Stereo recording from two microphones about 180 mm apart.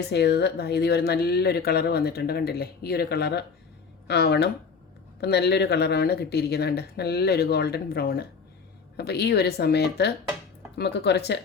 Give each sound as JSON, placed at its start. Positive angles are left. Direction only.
{"t": 0.1, "sound": "speech", "side_deg": 65}